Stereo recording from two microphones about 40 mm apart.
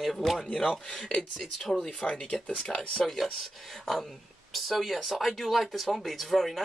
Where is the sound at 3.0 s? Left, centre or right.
Centre.